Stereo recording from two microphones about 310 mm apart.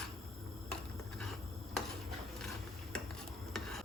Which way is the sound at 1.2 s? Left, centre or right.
Centre.